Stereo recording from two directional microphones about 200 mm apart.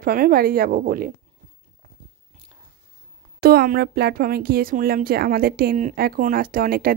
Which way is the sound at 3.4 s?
50° right (ahead or behind).